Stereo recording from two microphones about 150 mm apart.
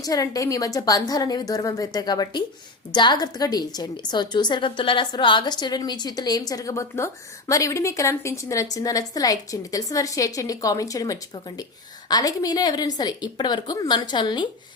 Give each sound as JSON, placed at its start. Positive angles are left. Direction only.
{"t": 0.0, "sound": "a woman's voice", "side_deg": 25}